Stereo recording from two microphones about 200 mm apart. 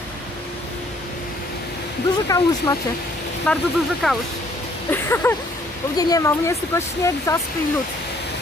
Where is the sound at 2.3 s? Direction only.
20° left (ahead or behind).